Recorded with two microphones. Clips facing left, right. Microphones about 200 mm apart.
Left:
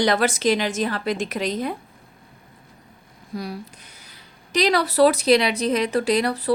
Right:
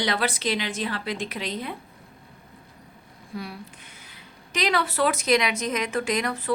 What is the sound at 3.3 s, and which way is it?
A woman's voice, 40° left (ahead or behind).